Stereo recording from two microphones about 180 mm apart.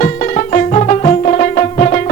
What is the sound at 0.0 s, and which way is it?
Music, 40° left (ahead or behind).